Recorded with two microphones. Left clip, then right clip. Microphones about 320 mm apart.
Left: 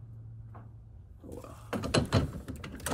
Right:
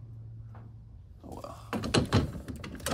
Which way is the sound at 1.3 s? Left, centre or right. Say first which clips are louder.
Right 1 dB; centre.